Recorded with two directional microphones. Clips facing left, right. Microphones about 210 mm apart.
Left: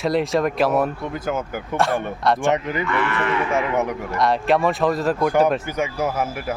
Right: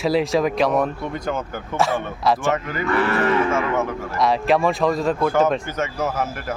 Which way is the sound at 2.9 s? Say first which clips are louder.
Right 6 dB; 40° right (ahead or behind).